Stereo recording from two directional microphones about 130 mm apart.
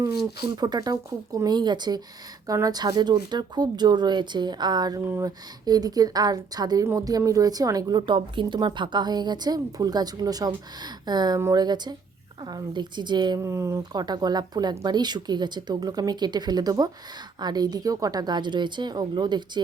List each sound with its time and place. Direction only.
0.0 s speech: 30° right (ahead or behind)
11.3 s speech: 20° right (ahead or behind)
11.6 s speech: 30° right (ahead or behind)